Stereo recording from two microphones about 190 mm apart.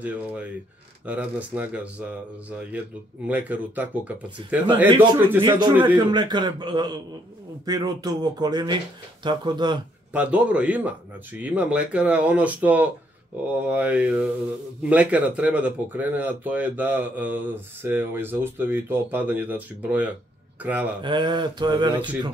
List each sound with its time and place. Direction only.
0.0 s speech: 5° right (ahead or behind)
3.3 s speech: 10° right (ahead or behind)
5.9 s speech: 25° right (ahead or behind)
10.1 s speech: 5° right (ahead or behind)
21.0 s speech: 25° right (ahead or behind)